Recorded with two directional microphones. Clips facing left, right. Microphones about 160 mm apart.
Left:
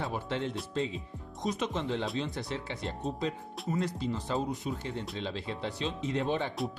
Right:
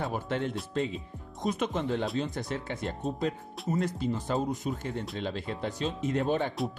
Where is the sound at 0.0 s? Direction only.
50° right (ahead or behind).